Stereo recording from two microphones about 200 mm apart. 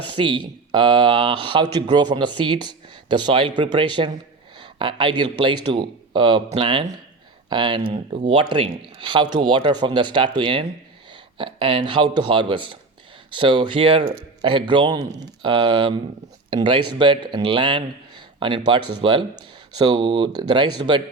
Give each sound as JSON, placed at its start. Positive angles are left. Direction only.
{"t": 0.1, "sound": "speech", "side_deg": -25}
{"t": 18.8, "sound": "speech", "side_deg": -90}
{"t": 19.8, "sound": "speech", "side_deg": -20}